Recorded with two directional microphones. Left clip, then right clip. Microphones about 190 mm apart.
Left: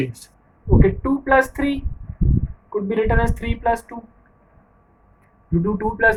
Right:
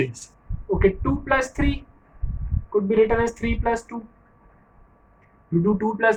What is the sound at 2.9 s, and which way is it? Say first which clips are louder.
Speech: right 1 dB; 25° left (ahead or behind).